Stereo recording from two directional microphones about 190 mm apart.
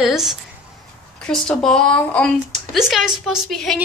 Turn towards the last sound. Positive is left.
turn(degrees=0)  # may be behind; listen again after turning